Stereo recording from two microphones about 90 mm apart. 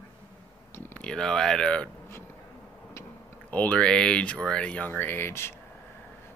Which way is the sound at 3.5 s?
15° left (ahead or behind).